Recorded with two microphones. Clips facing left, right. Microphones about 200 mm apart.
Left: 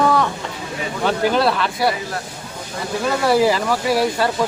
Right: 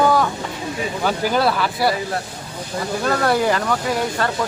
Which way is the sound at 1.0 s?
Centre (ahead or behind).